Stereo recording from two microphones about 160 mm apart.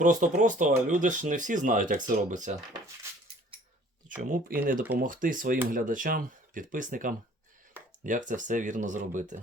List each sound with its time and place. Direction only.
0.0 s speech: 50° right (ahead or behind)
4.2 s speech: 65° right (ahead or behind)